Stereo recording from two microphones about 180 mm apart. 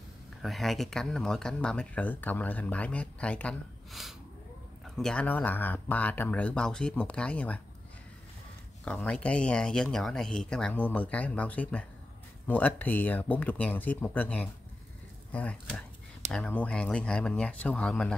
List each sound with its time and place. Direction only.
0.4 s speech: centre (ahead or behind)
8.8 s speech: 5° left (ahead or behind)